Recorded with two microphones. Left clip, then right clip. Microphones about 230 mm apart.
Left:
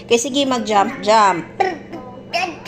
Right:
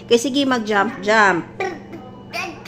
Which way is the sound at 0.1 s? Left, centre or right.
Right.